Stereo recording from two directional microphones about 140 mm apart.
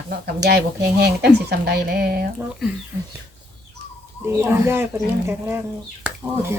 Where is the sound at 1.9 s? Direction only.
90° right.